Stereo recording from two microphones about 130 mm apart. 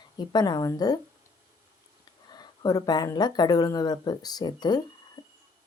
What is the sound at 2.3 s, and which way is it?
Speech, 30° left (ahead or behind).